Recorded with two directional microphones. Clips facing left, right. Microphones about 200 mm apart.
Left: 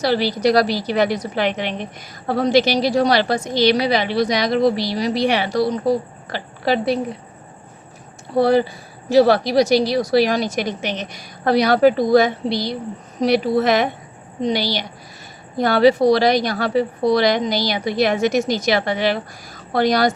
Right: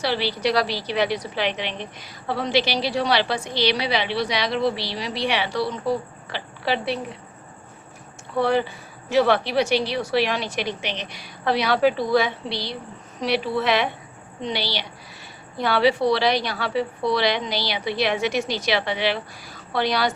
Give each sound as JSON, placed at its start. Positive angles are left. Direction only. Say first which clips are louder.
{"t": 0.0, "sound": "a woman's voice", "louder": "left 6 dB", "side_deg": 45}
{"t": 8.4, "sound": "a woman's voice", "louder": "left 6 dB", "side_deg": 40}